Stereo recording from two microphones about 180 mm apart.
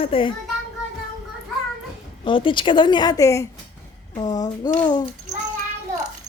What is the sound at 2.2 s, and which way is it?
A woman's voice, 30° left (ahead or behind).